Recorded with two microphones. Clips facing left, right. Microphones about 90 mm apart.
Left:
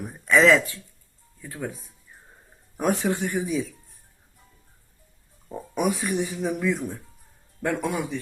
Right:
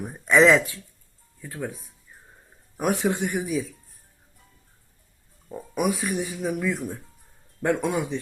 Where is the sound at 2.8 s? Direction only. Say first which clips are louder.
Even; 10° right (ahead or behind).